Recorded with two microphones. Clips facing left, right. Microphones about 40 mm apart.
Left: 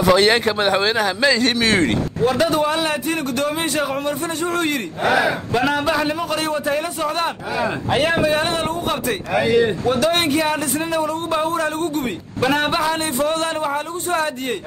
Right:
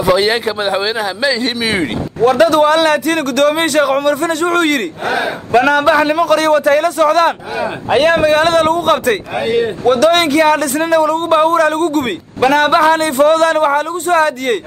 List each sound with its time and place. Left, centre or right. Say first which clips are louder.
0.0 s speech: right 2 dB; centre
2.2 s a man's voice: right 9 dB; right
3.5 s a man's voice: right 9 dB; right
5.6 s a man's voice: right 9 dB; right
7.9 s a man's voice: right 8 dB; right
8.2 s a man's voice: right 8 dB; right
12.7 s a man's voice: right 9 dB; right